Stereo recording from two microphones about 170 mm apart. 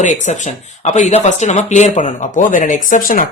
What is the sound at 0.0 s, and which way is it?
A man's voice, 45° left (ahead or behind).